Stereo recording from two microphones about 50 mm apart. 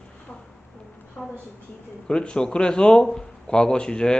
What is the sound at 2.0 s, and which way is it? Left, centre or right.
A man's voice, centre.